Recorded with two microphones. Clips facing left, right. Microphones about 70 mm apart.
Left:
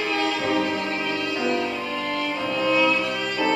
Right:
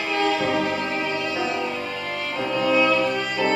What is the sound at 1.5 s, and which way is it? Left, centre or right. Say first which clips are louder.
Music: left 1 dB; centre.